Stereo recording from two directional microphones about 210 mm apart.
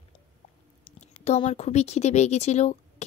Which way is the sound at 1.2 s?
30° left (ahead or behind).